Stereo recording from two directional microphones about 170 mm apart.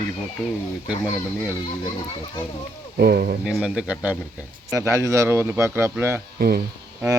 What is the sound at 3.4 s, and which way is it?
Speech, 5° right (ahead or behind).